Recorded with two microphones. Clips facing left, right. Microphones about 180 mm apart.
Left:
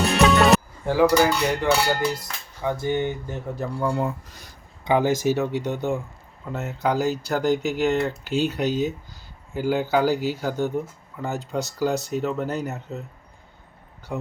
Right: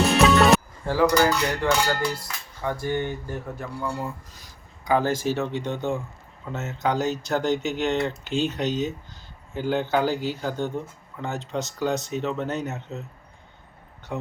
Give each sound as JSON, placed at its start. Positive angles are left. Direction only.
{"t": 0.0, "sound": "music", "side_deg": 0}
{"t": 0.9, "sound": "speech", "side_deg": 15}
{"t": 3.6, "sound": "speech", "side_deg": 50}
{"t": 4.9, "sound": "speech", "side_deg": 15}
{"t": 14.1, "sound": "speech", "side_deg": 0}